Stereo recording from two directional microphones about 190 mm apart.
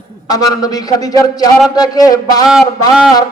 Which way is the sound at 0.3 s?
20° left (ahead or behind).